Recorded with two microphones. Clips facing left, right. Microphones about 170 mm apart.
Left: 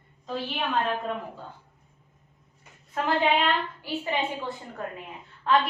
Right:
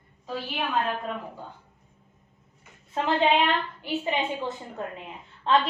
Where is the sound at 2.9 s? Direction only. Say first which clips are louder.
Right 1 dB; 20° right (ahead or behind).